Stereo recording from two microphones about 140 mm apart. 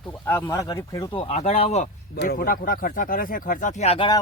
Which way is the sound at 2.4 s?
90° left.